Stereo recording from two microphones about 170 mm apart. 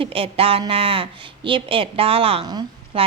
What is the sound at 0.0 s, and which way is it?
Speech, 35° right (ahead or behind).